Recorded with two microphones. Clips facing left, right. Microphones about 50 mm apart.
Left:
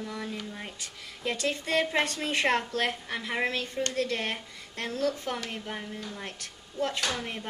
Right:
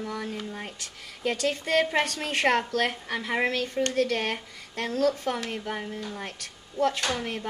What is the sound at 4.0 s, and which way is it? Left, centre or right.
Speech, right.